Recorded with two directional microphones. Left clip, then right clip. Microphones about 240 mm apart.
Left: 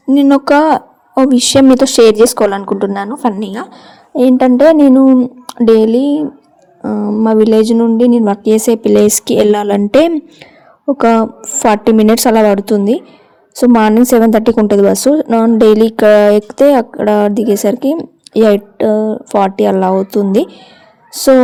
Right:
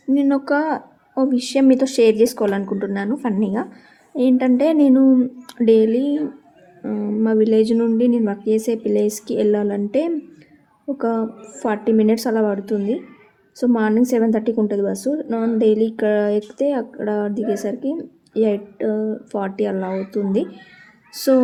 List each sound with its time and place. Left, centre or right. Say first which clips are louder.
0.1 s a woman's voice: left 10 dB; left